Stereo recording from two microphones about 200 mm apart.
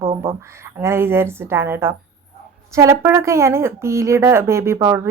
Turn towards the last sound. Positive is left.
turn(degrees=-10)  # may be behind; listen again after turning